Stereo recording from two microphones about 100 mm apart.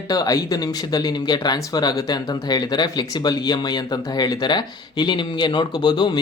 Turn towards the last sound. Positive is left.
turn(degrees=45)  # may be behind; listen again after turning